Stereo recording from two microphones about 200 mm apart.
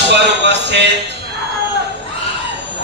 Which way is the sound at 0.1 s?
60° right (ahead or behind).